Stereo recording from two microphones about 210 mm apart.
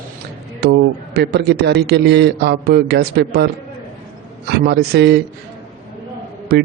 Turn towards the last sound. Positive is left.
turn(degrees=-50)  # may be behind; listen again after turning